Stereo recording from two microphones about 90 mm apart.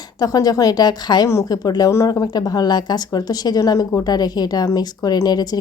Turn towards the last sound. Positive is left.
turn(degrees=50)  # may be behind; listen again after turning